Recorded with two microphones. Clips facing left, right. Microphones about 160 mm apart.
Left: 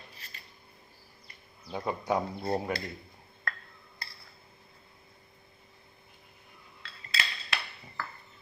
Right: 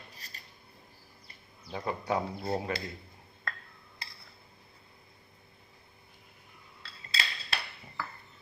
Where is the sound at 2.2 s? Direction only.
Centre (ahead or behind).